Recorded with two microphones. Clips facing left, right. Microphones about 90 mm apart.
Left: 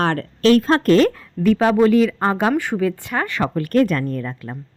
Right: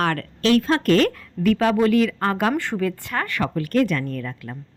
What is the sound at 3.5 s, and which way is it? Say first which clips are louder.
Speech: left 3 dB; 45° left (ahead or behind).